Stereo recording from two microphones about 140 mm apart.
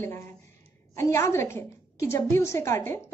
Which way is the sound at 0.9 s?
20° left (ahead or behind).